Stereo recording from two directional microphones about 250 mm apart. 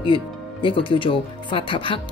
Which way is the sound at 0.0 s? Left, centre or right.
Centre.